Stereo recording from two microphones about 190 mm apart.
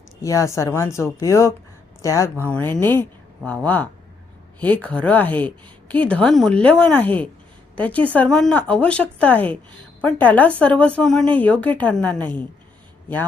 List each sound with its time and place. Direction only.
0.2 s speech: 15° left (ahead or behind)